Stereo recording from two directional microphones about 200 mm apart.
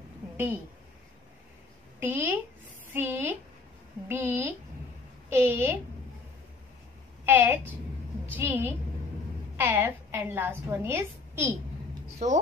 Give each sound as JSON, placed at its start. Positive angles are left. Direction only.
{"t": 2.0, "sound": "a woman's voice", "side_deg": -10}
{"t": 7.2, "sound": "a woman's voice", "side_deg": -10}